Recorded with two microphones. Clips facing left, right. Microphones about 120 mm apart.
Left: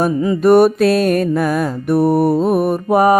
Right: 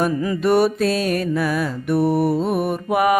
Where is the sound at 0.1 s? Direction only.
25° left (ahead or behind).